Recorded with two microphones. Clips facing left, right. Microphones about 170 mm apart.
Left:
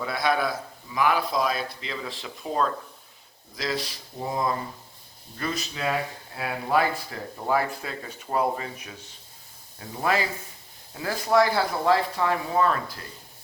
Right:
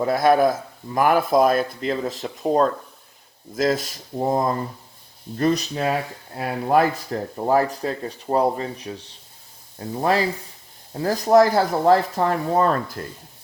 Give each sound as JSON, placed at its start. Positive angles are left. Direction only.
{"t": 0.0, "sound": "speech", "side_deg": -45}